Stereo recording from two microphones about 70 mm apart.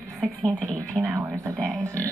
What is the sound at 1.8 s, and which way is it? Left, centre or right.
Speech, right.